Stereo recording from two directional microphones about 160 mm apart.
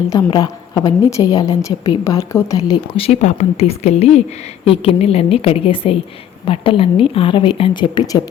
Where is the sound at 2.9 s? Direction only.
40° left (ahead or behind).